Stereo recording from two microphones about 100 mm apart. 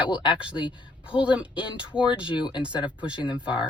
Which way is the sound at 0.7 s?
10° right (ahead or behind).